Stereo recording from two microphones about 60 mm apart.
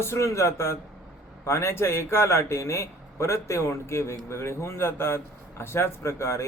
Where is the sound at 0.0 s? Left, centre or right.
Left.